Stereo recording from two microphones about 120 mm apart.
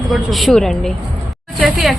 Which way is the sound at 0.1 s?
Centre (ahead or behind).